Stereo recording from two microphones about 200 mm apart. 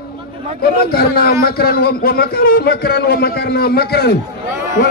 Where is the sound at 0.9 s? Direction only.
50° left (ahead or behind).